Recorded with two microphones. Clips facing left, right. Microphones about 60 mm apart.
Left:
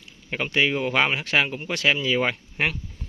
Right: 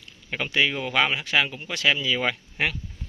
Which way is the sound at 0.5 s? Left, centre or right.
Left.